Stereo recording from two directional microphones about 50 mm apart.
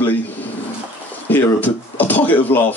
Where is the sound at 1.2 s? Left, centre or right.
Left.